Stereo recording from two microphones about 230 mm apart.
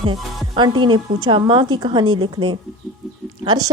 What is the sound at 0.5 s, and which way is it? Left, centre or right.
A woman's voice, centre.